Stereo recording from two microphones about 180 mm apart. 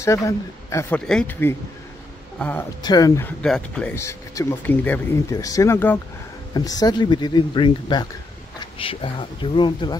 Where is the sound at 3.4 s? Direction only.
5° left (ahead or behind).